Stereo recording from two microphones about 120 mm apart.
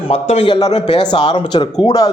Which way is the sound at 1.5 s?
40° left (ahead or behind).